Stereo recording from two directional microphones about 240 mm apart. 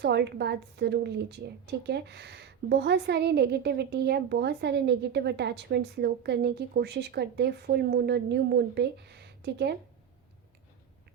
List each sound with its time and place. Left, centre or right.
0.0 s a woman's voice: right